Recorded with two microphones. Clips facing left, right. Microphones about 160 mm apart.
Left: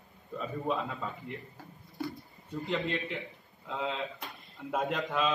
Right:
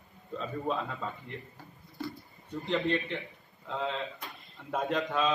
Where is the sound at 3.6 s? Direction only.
5° left (ahead or behind).